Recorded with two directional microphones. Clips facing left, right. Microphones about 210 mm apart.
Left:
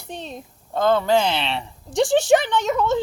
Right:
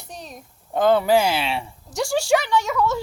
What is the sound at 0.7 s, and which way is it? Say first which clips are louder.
Speech: right 1 dB; 15° right (ahead or behind).